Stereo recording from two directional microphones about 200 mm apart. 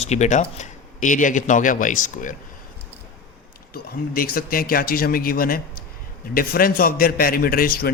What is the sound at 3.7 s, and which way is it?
A man's voice, 50° left (ahead or behind).